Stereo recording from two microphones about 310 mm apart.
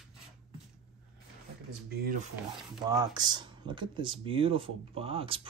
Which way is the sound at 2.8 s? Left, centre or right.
Centre.